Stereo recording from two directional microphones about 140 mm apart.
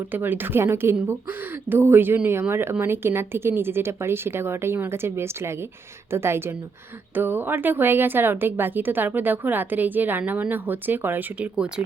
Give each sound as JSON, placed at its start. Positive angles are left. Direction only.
{"t": 0.1, "sound": "a woman's voice", "side_deg": -15}